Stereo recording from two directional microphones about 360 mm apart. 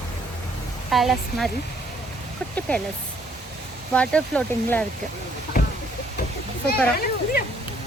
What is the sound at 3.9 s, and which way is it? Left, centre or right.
Speech, centre.